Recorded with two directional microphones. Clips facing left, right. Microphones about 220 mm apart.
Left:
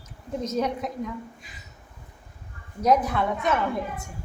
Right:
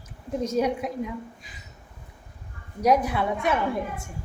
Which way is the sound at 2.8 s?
10° right (ahead or behind).